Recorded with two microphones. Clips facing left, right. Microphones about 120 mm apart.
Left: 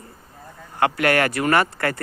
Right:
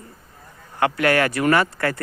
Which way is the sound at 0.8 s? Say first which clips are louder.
Even; 40° left (ahead or behind).